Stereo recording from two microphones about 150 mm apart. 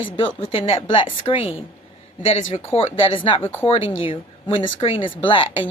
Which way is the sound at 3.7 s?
35° left (ahead or behind).